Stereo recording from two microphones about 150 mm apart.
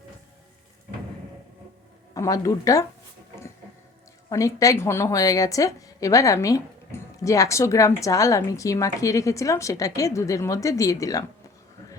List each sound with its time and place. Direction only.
2.1 s a woman's voice: 20° left (ahead or behind)
4.3 s a woman's voice: 20° left (ahead or behind)